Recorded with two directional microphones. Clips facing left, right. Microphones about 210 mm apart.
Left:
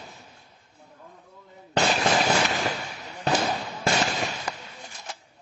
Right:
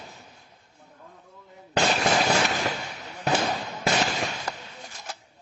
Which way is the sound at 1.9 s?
Centre (ahead or behind).